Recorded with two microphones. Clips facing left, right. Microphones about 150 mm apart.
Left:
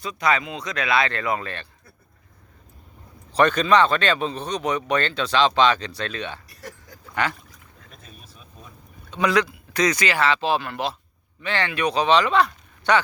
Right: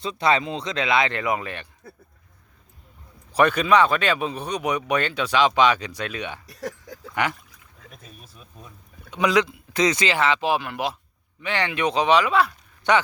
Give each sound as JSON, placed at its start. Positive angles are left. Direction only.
{"t": 0.0, "sound": "speech", "side_deg": -30}
{"t": 3.3, "sound": "speech", "side_deg": -10}
{"t": 6.6, "sound": "speech", "side_deg": -90}
{"t": 7.1, "sound": "speech", "side_deg": -15}
{"t": 7.9, "sound": "a sound", "side_deg": -5}
{"t": 9.0, "sound": "speech", "side_deg": -15}
{"t": 12.9, "sound": "speech", "side_deg": -20}